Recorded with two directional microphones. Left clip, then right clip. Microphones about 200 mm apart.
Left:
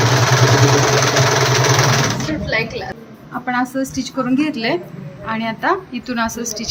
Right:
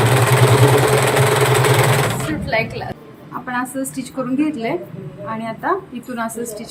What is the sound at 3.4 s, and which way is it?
A woman's voice, 15° left (ahead or behind).